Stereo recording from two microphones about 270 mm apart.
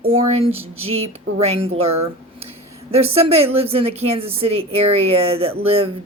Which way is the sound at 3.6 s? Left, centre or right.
Right.